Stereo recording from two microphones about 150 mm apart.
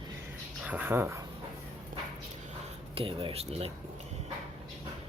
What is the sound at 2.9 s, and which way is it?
Speech, 40° right (ahead or behind).